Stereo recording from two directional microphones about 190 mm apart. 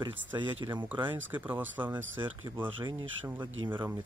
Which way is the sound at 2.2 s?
25° right (ahead or behind).